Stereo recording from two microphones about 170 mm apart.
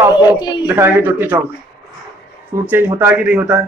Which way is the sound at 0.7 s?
10° right (ahead or behind).